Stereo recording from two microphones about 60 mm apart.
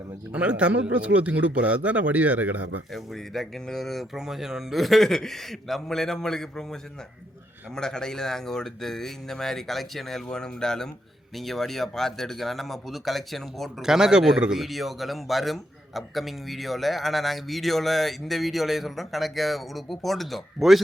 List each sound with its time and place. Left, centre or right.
0.3 s speech: right
2.9 s a man's voice: centre
7.8 s a man's voice: centre
13.8 s a man's voice: centre